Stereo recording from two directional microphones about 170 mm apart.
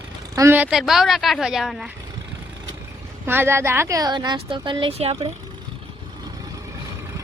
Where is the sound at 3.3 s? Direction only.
15° right (ahead or behind); by 5.2 s 35° right (ahead or behind).